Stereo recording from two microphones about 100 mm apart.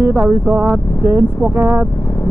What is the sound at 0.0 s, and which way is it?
Speech, 20° right (ahead or behind).